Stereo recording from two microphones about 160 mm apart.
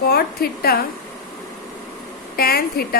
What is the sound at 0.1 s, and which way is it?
Speech, 75° left (ahead or behind).